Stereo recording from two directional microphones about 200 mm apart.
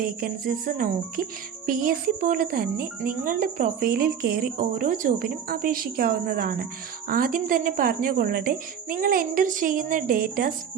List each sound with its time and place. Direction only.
0.0 s music: 45° right (ahead or behind)